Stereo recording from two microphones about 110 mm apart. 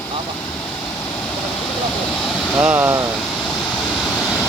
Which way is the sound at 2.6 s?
15° right (ahead or behind).